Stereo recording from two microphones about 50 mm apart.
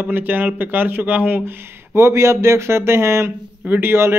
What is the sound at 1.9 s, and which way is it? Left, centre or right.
Speech, right.